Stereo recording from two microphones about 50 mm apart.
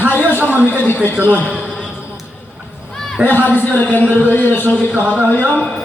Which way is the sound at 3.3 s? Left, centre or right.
Left.